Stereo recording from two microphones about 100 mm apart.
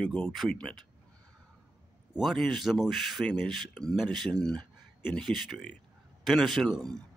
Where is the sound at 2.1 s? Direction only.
Centre (ahead or behind).